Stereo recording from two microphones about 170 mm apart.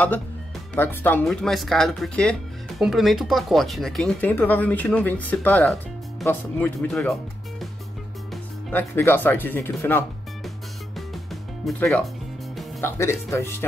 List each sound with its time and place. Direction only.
0.7 s speech: 10° left (ahead or behind)
8.6 s speech: 10° left (ahead or behind)
11.6 s speech: centre (ahead or behind)
12.8 s speech: 15° left (ahead or behind)